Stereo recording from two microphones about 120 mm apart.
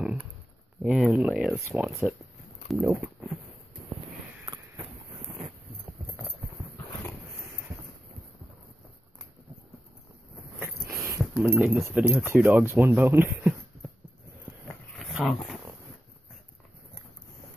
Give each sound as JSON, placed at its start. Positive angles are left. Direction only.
{"t": 0.8, "sound": "speech", "side_deg": -5}
{"t": 1.6, "sound": "speech", "side_deg": -20}
{"t": 10.6, "sound": "speech", "side_deg": -20}
{"t": 15.0, "sound": "dog", "side_deg": 0}